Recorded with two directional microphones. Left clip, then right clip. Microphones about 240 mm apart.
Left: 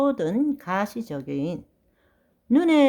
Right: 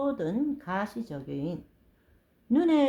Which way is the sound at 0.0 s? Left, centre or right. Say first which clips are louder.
Left 7 dB; left.